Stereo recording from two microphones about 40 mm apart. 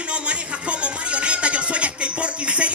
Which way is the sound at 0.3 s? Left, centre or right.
Right.